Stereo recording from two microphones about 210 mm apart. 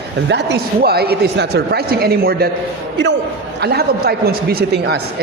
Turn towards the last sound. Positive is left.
turn(degrees=-50)  # may be behind; listen again after turning